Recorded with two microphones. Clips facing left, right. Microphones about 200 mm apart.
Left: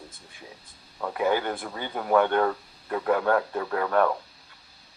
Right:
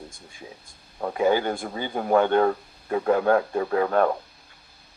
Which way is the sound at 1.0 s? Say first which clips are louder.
Right 3 dB; 30° right (ahead or behind).